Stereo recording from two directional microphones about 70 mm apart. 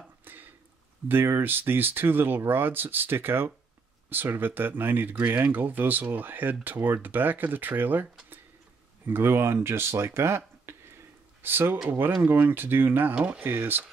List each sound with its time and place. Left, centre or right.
0.2 s a sound: right
1.0 s speech: right
13.1 s speech: centre
13.4 s speech: right